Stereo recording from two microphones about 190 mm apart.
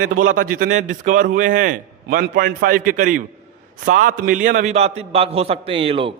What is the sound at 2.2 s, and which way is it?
A man's voice, 55° right (ahead or behind).